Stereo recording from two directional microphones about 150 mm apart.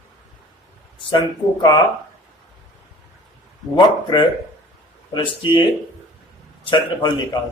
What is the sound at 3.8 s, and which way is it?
Speech, 30° left (ahead or behind).